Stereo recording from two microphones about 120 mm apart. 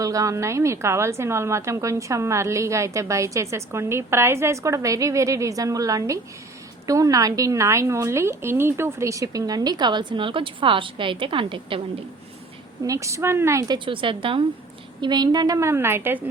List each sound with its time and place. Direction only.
0.0 s a woman's voice: 30° right (ahead or behind); by 11.8 s 45° right (ahead or behind)
12.8 s a woman's voice: 25° right (ahead or behind)
13.7 s a woman's voice: 45° right (ahead or behind)
15.0 s a woman's voice: 35° right (ahead or behind); by 16.2 s 20° right (ahead or behind)